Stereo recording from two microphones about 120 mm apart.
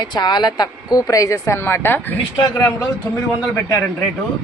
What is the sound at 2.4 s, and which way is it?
Speech, 30° left (ahead or behind).